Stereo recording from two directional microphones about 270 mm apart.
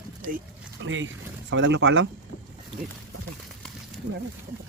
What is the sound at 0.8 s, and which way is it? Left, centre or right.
Speech, right.